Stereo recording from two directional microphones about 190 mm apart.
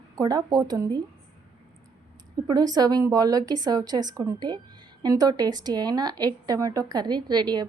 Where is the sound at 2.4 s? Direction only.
20° right (ahead or behind).